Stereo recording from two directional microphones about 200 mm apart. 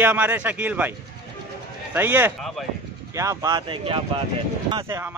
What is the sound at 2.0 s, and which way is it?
Speech, 10° right (ahead or behind).